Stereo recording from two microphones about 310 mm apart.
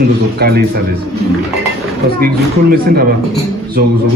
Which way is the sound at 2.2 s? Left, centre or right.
Right.